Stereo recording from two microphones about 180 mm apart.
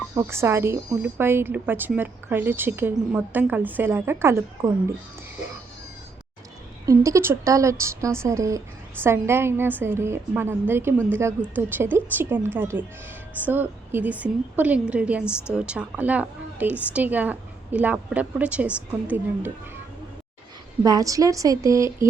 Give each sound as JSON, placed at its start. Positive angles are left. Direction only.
{"t": 0.1, "sound": "a woman's voice", "side_deg": -15}
{"t": 7.0, "sound": "a woman's voice", "side_deg": -15}
{"t": 20.8, "sound": "a woman's voice", "side_deg": -20}